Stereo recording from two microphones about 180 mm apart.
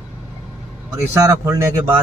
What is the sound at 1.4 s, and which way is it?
Speech, 15° right (ahead or behind).